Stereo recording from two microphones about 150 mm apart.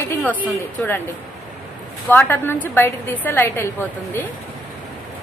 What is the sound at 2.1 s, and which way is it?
A woman's voice, 15° left (ahead or behind).